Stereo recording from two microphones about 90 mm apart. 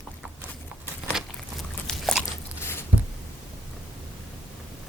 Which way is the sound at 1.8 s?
5° left (ahead or behind).